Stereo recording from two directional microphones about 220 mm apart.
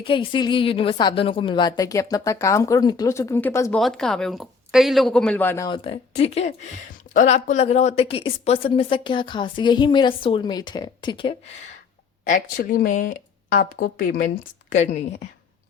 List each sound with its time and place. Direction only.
0.0 s a woman's voice: 25° left (ahead or behind)
12.2 s speech: 40° left (ahead or behind)